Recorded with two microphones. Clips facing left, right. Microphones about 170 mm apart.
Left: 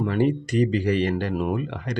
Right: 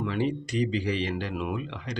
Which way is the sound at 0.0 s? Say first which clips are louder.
Left 6 dB; 50° left (ahead or behind).